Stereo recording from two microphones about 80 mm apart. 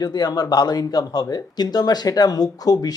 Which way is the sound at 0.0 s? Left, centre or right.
Left.